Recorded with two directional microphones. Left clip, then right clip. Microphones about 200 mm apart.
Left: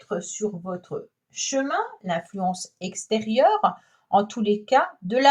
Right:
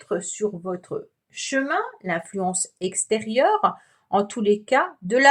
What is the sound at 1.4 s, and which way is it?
Speech, 40° right (ahead or behind).